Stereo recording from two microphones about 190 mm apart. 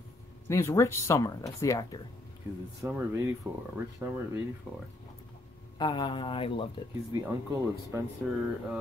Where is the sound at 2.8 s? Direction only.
10° right (ahead or behind).